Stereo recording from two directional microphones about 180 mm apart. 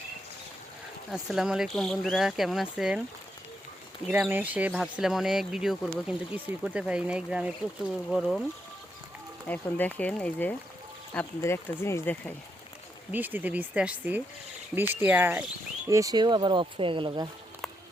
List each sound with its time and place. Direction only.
1.1 s speech: 5° right (ahead or behind)
4.1 s speech: 10° right (ahead or behind)
9.5 s speech: 10° left (ahead or behind)
13.1 s speech: 10° right (ahead or behind); by 17.2 s 25° right (ahead or behind)